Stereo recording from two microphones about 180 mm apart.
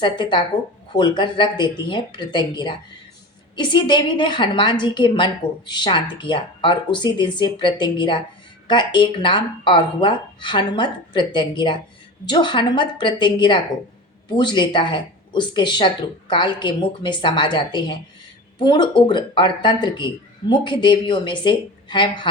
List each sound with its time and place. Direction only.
0.0 s a woman's voice: 25° left (ahead or behind)